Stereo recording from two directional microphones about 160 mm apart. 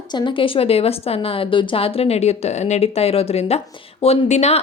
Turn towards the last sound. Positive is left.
turn(degrees=45)  # may be behind; listen again after turning